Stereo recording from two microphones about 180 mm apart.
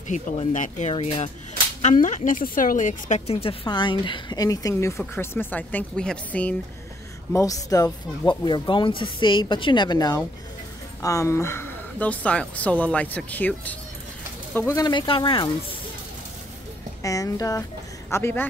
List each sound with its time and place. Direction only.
0.1 s speech: 45° left (ahead or behind); by 6.5 s 5° left (ahead or behind)
7.3 s speech: 20° left (ahead or behind)
14.9 s speech: 25° left (ahead or behind)
17.0 s speech: 20° left (ahead or behind)